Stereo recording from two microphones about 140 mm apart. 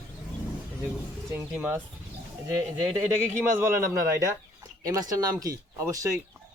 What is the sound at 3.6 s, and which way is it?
Speech, 20° right (ahead or behind).